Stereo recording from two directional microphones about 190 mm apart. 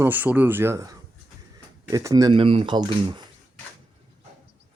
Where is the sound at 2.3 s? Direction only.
30° right (ahead or behind).